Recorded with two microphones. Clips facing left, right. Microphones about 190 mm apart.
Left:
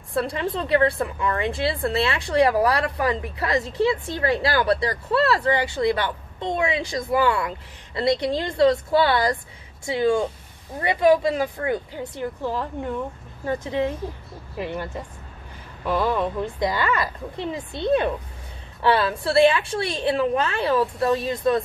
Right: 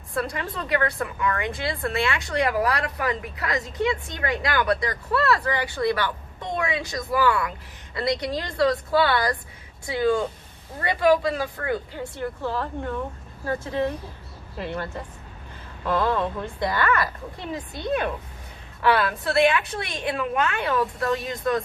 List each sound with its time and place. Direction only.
0.1 s a woman's voice: 30° left (ahead or behind)